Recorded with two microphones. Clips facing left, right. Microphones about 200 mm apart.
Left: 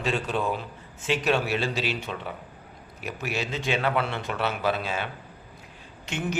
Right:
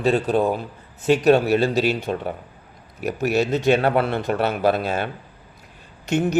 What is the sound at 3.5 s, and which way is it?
A man's voice, 45° right (ahead or behind).